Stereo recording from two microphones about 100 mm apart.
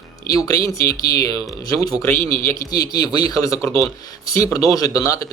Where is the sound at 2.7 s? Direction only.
40° left (ahead or behind).